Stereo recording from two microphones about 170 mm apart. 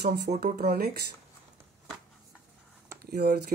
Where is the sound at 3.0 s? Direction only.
70° right (ahead or behind).